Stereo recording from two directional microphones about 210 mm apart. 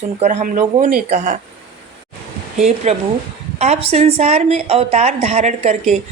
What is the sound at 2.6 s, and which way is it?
A woman's voice, 30° right (ahead or behind).